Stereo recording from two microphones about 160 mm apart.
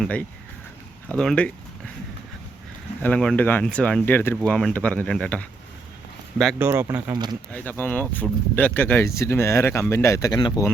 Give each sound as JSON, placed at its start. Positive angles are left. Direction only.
{"t": 0.0, "sound": "speech", "side_deg": 10}
{"t": 3.0, "sound": "speech", "side_deg": 5}
{"t": 6.6, "sound": "speech", "side_deg": -15}
{"t": 7.1, "sound": "speech", "side_deg": -25}
{"t": 7.5, "sound": "speech", "side_deg": 10}